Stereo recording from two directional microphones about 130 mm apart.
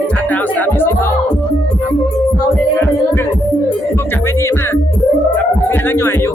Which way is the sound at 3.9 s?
20° left (ahead or behind).